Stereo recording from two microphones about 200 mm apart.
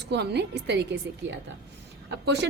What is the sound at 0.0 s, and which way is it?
Speech, 55° right (ahead or behind).